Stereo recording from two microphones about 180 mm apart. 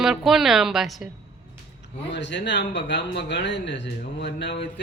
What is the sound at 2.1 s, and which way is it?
Speech, 80° left.